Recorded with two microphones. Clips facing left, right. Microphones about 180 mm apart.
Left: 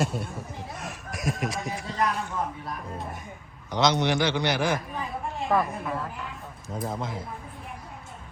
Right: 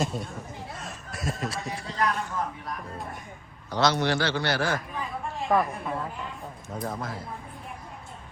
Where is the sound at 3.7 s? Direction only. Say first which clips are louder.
Left 1 dB; 20° left (ahead or behind).